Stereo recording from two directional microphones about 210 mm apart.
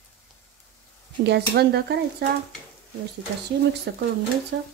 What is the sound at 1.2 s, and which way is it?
A woman's voice, 50° right (ahead or behind).